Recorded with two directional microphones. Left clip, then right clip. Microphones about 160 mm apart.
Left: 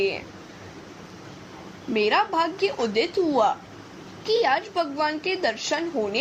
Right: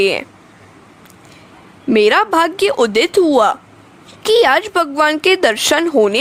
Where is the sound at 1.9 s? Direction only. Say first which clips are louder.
Right 10 dB; 60° right (ahead or behind).